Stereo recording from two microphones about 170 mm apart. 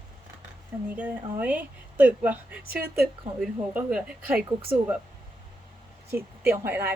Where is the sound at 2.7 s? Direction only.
60° right (ahead or behind).